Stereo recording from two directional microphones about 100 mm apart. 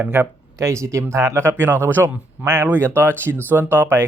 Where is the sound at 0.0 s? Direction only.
20° right (ahead or behind).